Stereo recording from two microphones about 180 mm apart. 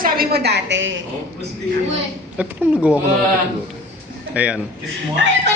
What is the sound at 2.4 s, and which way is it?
Speech, 5° right (ahead or behind).